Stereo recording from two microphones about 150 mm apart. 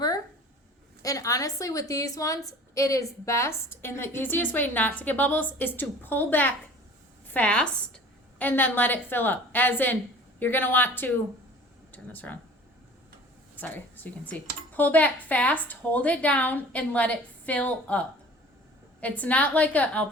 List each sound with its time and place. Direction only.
1.0 s a woman's voice: 25° left (ahead or behind)
13.6 s a woman's voice: 10° left (ahead or behind)